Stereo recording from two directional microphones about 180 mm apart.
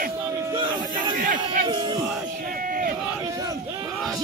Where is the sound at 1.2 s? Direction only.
50° right (ahead or behind).